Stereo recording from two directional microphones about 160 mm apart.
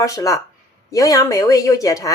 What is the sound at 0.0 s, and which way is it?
A woman's voice, 20° left (ahead or behind).